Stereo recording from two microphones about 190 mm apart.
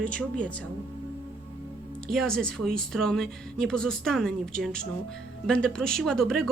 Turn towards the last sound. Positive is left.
turn(degrees=0)  # may be behind; listen again after turning